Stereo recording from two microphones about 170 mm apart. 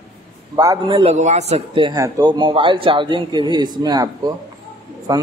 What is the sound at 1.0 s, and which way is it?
Speech, 40° right (ahead or behind).